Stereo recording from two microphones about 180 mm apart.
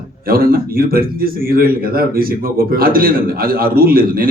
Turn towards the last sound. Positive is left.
turn(degrees=-55)  # may be behind; listen again after turning